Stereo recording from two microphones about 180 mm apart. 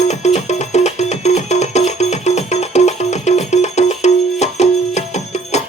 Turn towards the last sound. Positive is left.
turn(degrees=40)  # may be behind; listen again after turning